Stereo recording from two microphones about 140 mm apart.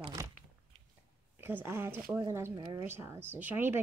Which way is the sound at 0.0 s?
30° right (ahead or behind).